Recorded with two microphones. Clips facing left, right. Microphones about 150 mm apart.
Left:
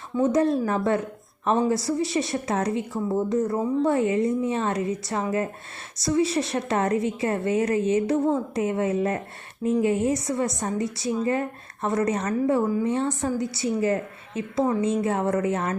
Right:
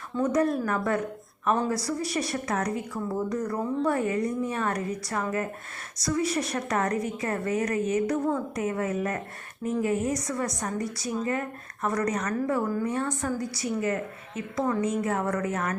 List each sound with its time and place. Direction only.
0.2 s a woman's voice: 25° left (ahead or behind)